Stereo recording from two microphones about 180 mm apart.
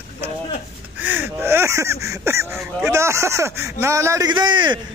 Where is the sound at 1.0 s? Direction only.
10° right (ahead or behind).